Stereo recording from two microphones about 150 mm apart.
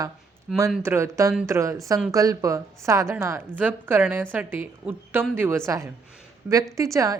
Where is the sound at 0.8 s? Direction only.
15° right (ahead or behind).